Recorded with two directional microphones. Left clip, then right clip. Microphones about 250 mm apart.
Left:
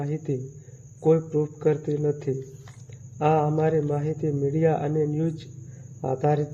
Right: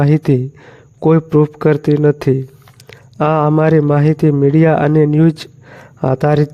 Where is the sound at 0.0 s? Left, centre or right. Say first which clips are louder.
Right 16 dB; right.